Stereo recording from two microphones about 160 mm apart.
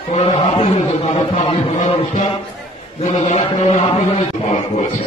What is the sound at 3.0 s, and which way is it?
Chant, 40° left (ahead or behind).